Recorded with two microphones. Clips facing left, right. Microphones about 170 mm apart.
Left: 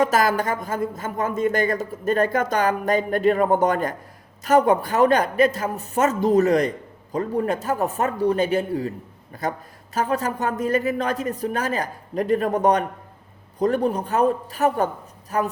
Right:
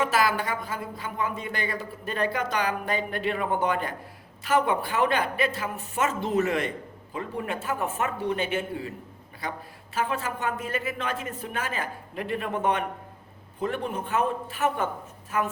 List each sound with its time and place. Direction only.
0.0 s speech: 40° left (ahead or behind)